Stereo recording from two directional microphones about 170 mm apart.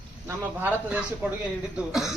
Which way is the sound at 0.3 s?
10° right (ahead or behind).